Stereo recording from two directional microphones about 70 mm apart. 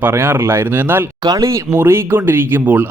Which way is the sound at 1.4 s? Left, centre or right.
Right.